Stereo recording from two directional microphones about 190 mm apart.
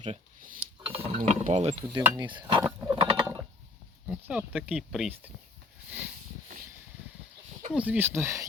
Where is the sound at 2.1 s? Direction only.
25° right (ahead or behind).